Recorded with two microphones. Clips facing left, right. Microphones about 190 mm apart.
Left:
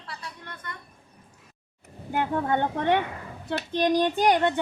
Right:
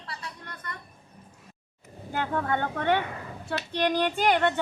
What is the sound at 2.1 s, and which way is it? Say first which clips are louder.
Speech: left 3 dB; 20° left (ahead or behind).